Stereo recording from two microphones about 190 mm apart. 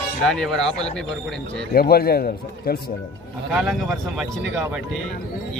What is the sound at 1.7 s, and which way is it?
A man's voice, 55° left (ahead or behind).